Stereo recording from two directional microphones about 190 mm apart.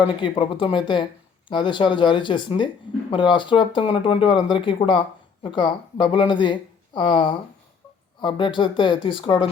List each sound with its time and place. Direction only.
0.0 s speech: 25° left (ahead or behind)